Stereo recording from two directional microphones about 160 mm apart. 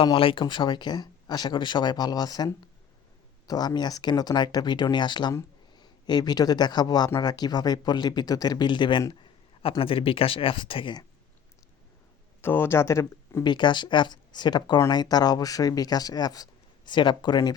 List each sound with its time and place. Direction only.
0.0 s speech: 35° left (ahead or behind)
12.4 s speech: 15° left (ahead or behind)